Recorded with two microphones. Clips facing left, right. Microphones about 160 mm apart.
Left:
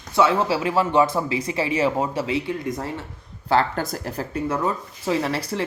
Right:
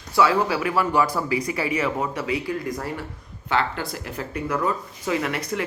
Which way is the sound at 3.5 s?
40° left (ahead or behind).